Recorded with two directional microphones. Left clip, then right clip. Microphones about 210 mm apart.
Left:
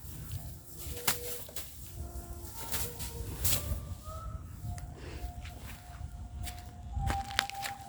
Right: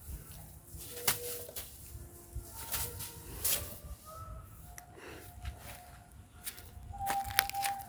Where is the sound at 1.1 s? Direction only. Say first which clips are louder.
Left 1 dB; 10° right (ahead or behind).